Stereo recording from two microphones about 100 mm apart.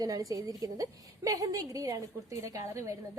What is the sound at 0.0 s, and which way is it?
A woman's voice, 35° right (ahead or behind).